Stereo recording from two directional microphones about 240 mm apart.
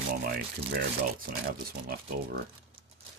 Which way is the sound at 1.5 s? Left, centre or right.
Right.